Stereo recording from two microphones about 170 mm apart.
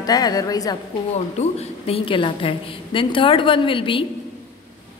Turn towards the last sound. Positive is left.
turn(degrees=30)  # may be behind; listen again after turning